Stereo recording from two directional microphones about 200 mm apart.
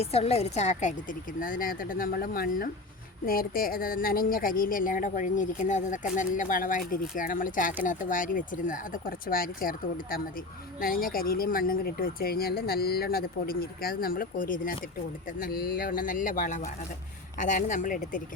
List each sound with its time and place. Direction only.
0.0 s a woman's voice: 30° left (ahead or behind)